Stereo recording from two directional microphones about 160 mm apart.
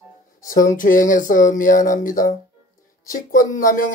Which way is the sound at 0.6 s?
55° left (ahead or behind).